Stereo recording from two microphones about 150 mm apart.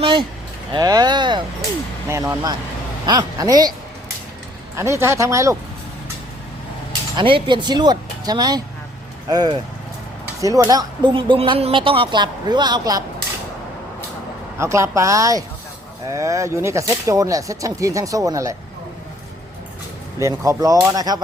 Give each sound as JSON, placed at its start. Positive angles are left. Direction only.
{"t": 0.0, "sound": "speech", "side_deg": -35}
{"t": 0.7, "sound": "speech", "side_deg": -25}
{"t": 2.0, "sound": "speech", "side_deg": -20}
{"t": 4.8, "sound": "speech", "side_deg": -20}
{"t": 7.2, "sound": "speech", "side_deg": -35}
{"t": 14.6, "sound": "speech", "side_deg": -20}
{"t": 20.2, "sound": "speech", "side_deg": -20}